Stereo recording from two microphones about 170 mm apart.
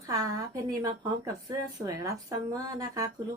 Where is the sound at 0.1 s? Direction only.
20° right (ahead or behind).